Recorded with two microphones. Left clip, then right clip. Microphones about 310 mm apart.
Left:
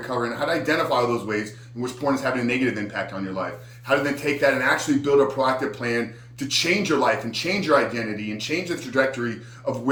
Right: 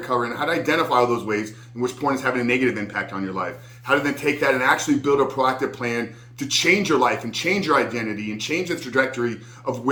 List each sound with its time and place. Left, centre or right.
0.1 s a man's voice: centre